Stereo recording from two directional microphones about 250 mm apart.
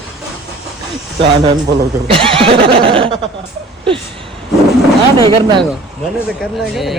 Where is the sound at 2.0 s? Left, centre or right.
Right.